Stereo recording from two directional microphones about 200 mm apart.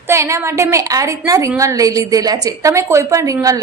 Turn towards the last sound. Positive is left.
turn(degrees=-15)  # may be behind; listen again after turning